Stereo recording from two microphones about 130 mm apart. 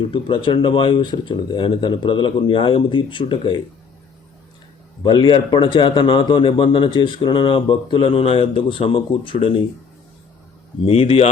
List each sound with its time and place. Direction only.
0.1 s speech: 40° left (ahead or behind)
5.0 s speech: 40° left (ahead or behind)
10.8 s speech: 45° left (ahead or behind)